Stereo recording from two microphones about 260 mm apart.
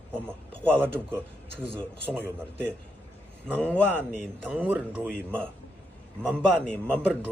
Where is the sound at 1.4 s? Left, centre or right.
Right.